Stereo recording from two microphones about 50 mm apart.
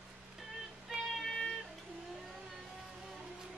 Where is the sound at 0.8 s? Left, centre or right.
Centre.